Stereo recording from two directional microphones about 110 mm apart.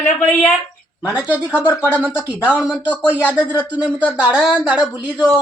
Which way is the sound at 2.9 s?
15° left (ahead or behind).